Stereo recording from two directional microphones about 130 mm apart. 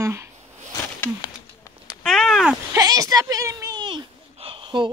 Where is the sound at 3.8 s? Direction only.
40° right (ahead or behind).